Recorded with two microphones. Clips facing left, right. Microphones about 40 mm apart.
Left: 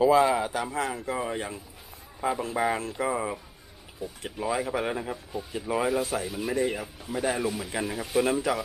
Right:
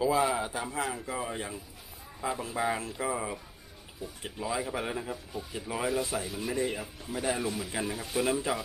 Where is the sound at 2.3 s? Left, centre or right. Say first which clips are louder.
Left 5 dB; centre.